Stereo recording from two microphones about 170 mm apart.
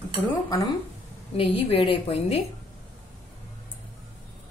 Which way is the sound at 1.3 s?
35° left (ahead or behind).